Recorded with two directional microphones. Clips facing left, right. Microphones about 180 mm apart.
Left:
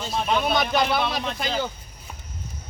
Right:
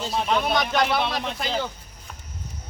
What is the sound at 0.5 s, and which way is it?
Speech, 5° left (ahead or behind).